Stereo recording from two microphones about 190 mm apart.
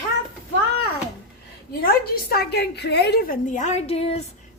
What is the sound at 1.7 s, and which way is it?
A woman's voice, 55° left (ahead or behind).